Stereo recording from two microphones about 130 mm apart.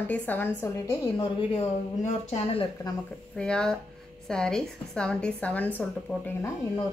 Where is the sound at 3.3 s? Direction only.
5° left (ahead or behind).